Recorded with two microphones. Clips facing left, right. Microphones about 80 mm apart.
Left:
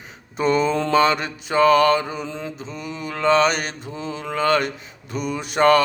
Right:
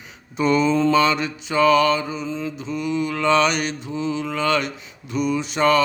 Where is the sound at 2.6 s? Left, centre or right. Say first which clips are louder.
Right 7 dB; left.